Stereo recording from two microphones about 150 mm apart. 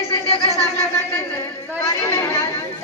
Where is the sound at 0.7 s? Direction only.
15° left (ahead or behind).